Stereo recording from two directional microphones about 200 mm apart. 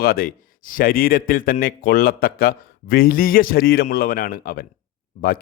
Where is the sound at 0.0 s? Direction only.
45° left (ahead or behind).